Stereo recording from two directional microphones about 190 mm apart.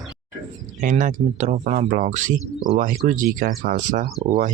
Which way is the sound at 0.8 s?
45° right (ahead or behind).